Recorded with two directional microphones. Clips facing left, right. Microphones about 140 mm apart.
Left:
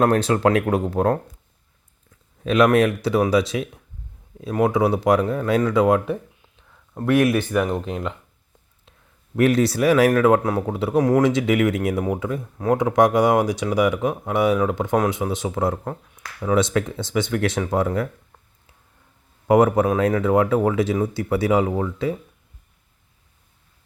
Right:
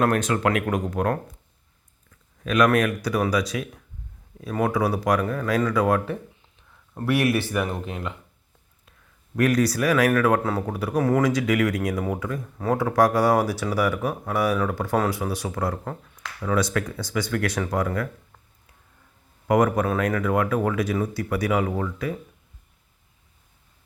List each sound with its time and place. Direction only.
0.0 s speech: 30° left (ahead or behind)
2.4 s speech: 25° left (ahead or behind)
9.3 s speech: 25° left (ahead or behind)
15.8 s speech: 10° left (ahead or behind)
16.1 s speech: 20° left (ahead or behind)
19.5 s speech: 25° left (ahead or behind)